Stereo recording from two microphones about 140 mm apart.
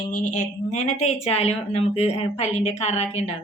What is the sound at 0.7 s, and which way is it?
Speech, 50° left (ahead or behind).